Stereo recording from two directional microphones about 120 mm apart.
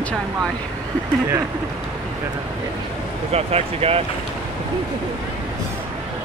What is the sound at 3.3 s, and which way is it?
Speech, 60° right (ahead or behind).